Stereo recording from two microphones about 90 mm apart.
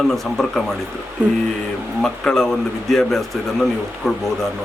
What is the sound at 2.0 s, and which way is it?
Speech, 5° left (ahead or behind).